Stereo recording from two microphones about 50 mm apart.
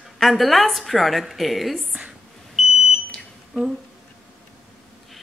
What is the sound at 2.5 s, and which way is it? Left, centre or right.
Smoke detector, centre.